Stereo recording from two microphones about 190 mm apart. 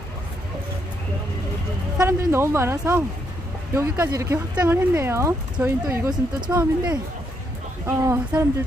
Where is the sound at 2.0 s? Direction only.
15° right (ahead or behind).